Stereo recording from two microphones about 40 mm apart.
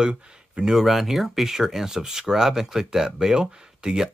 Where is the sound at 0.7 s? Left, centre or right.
Centre.